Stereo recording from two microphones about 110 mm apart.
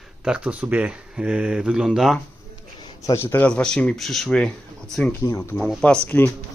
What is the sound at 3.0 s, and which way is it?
Speech, 25° left (ahead or behind).